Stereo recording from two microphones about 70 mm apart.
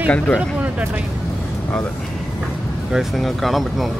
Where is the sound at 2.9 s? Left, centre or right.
Centre.